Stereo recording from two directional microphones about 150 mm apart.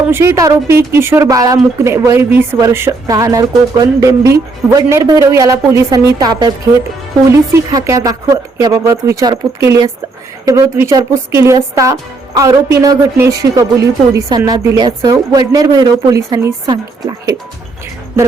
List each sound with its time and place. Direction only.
0.0 s a woman's voice: 15° right (ahead or behind)